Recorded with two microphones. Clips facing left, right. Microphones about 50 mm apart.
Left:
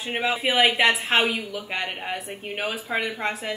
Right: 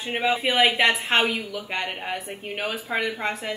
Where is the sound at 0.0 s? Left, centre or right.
Centre.